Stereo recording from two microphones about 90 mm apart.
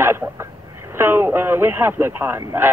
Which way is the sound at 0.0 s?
30° right (ahead or behind).